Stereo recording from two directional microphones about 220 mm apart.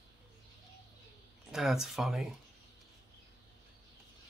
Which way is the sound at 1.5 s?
Centre (ahead or behind).